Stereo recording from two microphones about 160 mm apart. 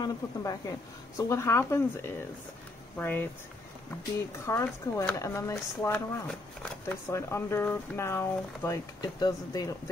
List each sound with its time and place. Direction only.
0.0 s speech: 20° left (ahead or behind)
4.5 s speech: 15° left (ahead or behind)